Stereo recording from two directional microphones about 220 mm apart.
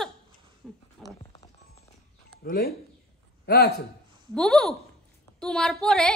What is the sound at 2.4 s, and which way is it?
A man's voice, 45° left (ahead or behind).